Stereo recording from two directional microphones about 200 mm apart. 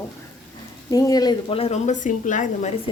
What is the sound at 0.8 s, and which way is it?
A woman's voice, 15° left (ahead or behind).